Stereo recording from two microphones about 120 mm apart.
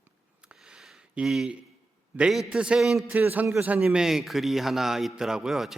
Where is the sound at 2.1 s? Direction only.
5° right (ahead or behind).